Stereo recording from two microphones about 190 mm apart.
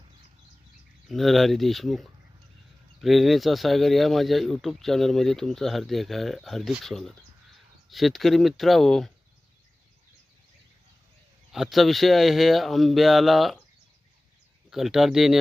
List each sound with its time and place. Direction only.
1.0 s speech: centre (ahead or behind)
11.5 s speech: centre (ahead or behind)
14.7 s speech: centre (ahead or behind)